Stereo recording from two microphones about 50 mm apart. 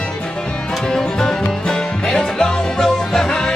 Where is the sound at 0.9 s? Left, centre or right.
Centre.